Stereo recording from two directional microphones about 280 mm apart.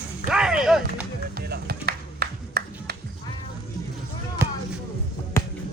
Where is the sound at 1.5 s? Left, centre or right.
Right.